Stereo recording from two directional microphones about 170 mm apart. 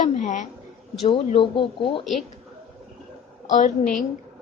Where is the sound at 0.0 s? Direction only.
45° left (ahead or behind).